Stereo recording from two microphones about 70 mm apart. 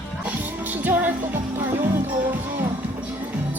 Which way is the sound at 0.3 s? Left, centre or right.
Right.